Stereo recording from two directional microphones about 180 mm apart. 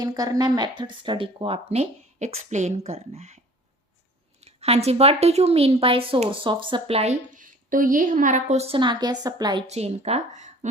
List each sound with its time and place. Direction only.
0.0 s a woman's voice: 20° right (ahead or behind)
9.6 s a woman's voice: 35° right (ahead or behind)